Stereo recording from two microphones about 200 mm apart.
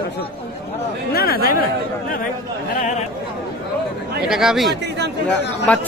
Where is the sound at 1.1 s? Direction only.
50° left (ahead or behind).